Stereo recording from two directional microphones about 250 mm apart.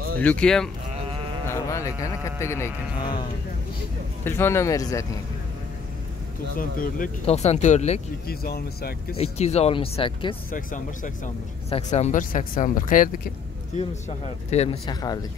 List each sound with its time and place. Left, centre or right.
0.2 s speech: centre
4.2 s speech: centre
6.5 s speech: left
8.3 s speech: left
9.2 s speech: left
10.5 s speech: left; by 15.1 s centre